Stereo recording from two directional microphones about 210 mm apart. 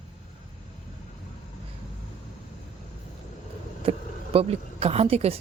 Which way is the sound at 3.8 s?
30° right (ahead or behind).